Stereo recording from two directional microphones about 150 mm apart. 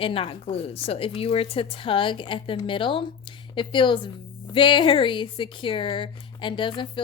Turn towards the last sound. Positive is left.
turn(degrees=35)  # may be behind; listen again after turning